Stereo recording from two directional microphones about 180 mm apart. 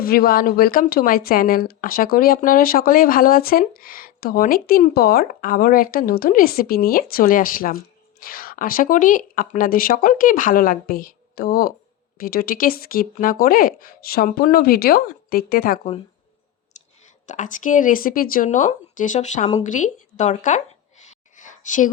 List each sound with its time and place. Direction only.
0.0 s speech: 55° left (ahead or behind)
17.2 s speech: 45° left (ahead or behind)
21.0 s a sound: 40° left (ahead or behind)